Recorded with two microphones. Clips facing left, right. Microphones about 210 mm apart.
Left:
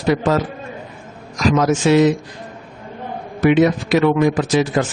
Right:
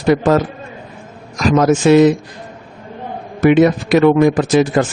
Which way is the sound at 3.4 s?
50° right (ahead or behind).